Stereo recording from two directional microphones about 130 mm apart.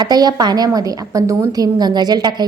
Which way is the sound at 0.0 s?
30° right (ahead or behind).